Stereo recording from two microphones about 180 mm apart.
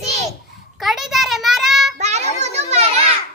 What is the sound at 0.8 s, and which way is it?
Child singing, centre (ahead or behind).